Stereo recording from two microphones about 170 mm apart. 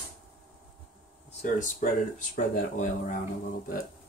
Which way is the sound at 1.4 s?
50° left (ahead or behind).